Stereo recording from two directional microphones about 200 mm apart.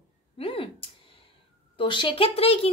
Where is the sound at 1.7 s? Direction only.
25° left (ahead or behind).